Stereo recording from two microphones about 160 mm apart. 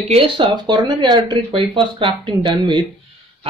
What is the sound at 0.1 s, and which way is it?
Speech, 35° right (ahead or behind).